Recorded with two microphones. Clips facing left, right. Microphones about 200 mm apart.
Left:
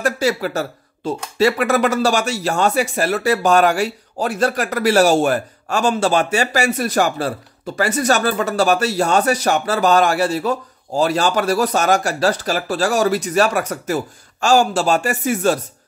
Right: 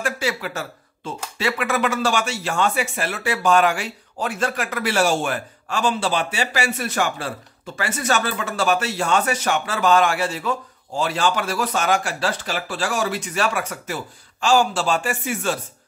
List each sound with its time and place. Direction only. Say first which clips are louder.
0.0 s speech: left 6 dB; 40° left (ahead or behind)